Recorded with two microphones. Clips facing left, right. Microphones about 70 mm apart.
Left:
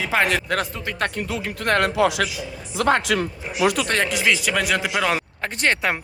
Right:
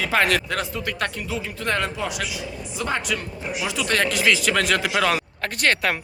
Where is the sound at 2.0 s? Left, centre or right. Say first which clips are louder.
Left 8 dB; left.